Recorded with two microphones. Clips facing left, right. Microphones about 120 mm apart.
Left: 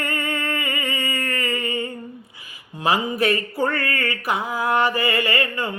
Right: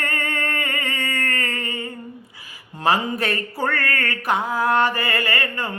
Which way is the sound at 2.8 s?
10° left (ahead or behind).